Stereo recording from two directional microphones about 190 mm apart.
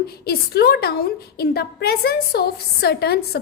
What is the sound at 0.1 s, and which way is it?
A woman's voice, 55° left (ahead or behind).